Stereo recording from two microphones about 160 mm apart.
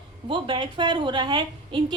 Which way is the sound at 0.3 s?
30° right (ahead or behind).